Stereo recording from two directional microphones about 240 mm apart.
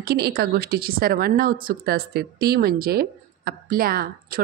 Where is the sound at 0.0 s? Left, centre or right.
Right.